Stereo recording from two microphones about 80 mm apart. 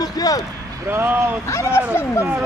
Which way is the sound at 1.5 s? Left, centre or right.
Left.